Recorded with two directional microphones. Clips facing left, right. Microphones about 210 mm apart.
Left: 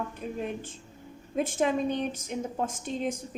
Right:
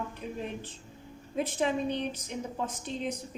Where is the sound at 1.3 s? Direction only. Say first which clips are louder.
Left 3 dB; 45° left (ahead or behind).